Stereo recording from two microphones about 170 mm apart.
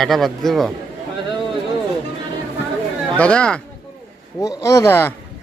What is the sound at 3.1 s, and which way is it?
Speech, 5° left (ahead or behind).